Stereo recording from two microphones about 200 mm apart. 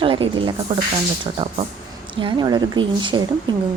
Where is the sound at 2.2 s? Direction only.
25° right (ahead or behind).